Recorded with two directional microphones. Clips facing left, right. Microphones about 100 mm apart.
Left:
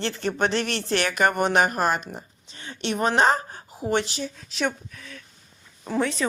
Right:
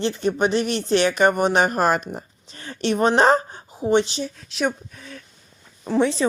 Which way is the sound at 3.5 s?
20° right (ahead or behind).